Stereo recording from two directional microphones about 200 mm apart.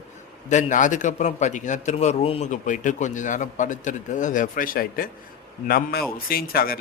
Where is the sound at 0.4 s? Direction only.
40° left (ahead or behind).